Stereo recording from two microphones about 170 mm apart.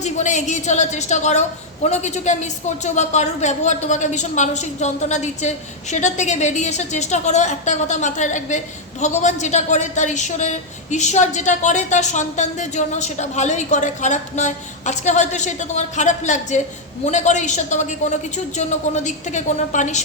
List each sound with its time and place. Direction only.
0.0 s a woman's voice: 45° left (ahead or behind)